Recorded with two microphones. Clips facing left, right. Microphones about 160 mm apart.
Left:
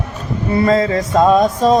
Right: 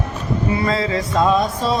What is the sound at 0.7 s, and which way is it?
Music, 45° left (ahead or behind).